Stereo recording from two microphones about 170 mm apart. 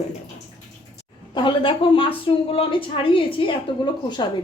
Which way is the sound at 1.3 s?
25° left (ahead or behind).